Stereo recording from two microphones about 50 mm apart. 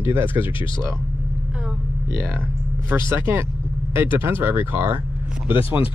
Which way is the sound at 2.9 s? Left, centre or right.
Right.